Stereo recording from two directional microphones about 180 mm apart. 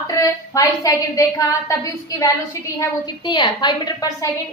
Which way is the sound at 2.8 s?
20° left (ahead or behind).